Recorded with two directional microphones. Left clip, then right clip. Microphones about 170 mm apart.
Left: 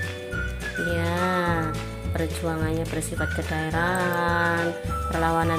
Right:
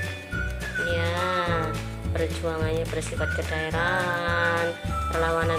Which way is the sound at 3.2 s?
45° left (ahead or behind).